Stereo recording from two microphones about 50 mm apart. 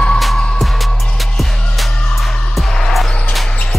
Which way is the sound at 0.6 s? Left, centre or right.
Centre.